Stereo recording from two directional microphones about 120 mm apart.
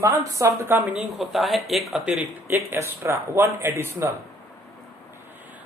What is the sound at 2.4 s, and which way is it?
Speech, 20° right (ahead or behind).